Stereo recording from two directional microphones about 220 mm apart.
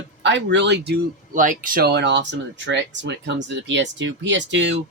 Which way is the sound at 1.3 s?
35° right (ahead or behind).